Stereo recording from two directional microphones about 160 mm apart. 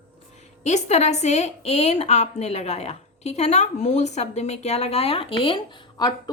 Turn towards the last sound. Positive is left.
turn(degrees=25)  # may be behind; listen again after turning